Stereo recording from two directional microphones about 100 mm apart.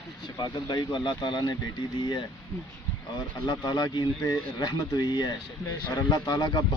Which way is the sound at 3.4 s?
45° left (ahead or behind).